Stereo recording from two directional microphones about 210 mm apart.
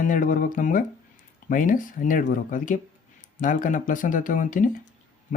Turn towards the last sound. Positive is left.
turn(degrees=40)  # may be behind; listen again after turning